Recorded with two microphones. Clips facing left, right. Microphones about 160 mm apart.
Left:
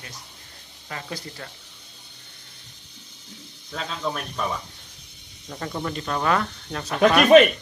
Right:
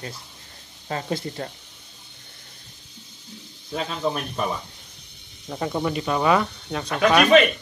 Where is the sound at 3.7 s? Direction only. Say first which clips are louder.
Right 4 dB; 10° right (ahead or behind).